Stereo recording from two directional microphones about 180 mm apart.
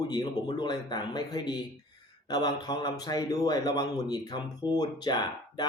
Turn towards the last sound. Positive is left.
turn(degrees=25)  # may be behind; listen again after turning